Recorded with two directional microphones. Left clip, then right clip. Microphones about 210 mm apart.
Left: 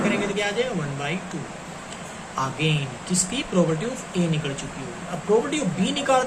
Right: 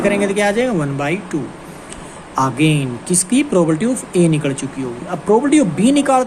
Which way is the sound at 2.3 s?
55° right (ahead or behind).